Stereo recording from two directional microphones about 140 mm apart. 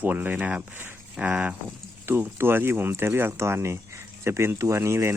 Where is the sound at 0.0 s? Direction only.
10° right (ahead or behind).